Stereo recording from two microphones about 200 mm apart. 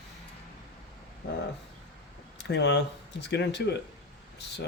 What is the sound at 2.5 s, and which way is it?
Speech, 60° left (ahead or behind).